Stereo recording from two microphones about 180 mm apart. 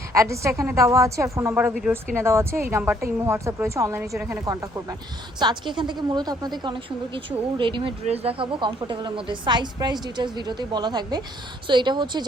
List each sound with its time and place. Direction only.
0.1 s a woman's voice: 15° right (ahead or behind)
5.4 s a woman's voice: 25° right (ahead or behind)